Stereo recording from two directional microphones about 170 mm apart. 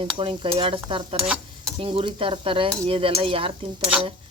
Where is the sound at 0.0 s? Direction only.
30° right (ahead or behind).